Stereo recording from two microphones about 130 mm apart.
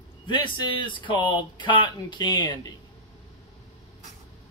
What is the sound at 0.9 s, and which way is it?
Speech, 40° left (ahead or behind).